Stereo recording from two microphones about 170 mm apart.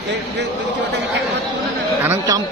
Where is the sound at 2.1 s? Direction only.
20° right (ahead or behind).